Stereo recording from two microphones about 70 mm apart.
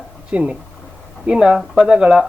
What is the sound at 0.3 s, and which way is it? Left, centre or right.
Speech, centre.